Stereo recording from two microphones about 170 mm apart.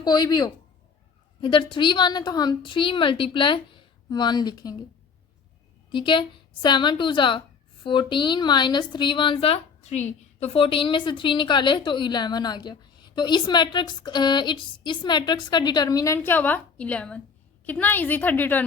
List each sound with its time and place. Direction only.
0.0 s a woman's voice: 25° left (ahead or behind)
5.9 s a woman's voice: 30° left (ahead or behind); by 18.6 s 10° left (ahead or behind)